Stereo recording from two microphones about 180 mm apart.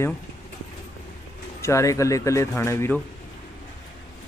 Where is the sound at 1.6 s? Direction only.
15° left (ahead or behind).